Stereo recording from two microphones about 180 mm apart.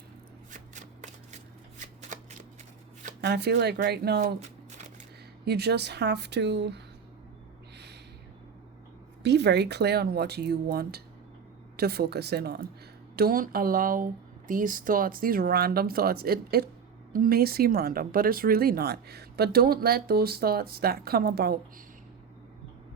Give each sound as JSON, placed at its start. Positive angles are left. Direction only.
{"t": 0.5, "sound": "shuffling cards", "side_deg": -45}
{"t": 3.2, "sound": "speech", "side_deg": -65}
{"t": 4.4, "sound": "shuffling cards", "side_deg": -40}
{"t": 5.5, "sound": "a woman's voice", "side_deg": -65}
{"t": 9.2, "sound": "speech", "side_deg": -70}